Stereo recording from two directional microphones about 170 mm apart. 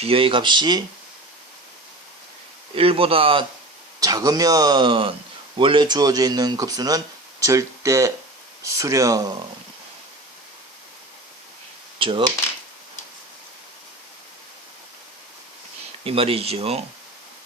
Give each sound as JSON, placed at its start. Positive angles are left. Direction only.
{"t": 0.0, "sound": "speech", "side_deg": -35}
{"t": 2.7, "sound": "speech", "side_deg": -35}
{"t": 4.0, "sound": "speech", "side_deg": -20}
{"t": 11.9, "sound": "speech", "side_deg": -30}
{"t": 16.0, "sound": "speech", "side_deg": -35}